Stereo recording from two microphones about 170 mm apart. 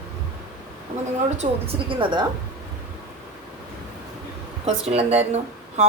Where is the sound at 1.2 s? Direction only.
40° right (ahead or behind).